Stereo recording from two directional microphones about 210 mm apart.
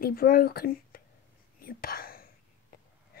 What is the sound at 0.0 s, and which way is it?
Speech, 45° left (ahead or behind).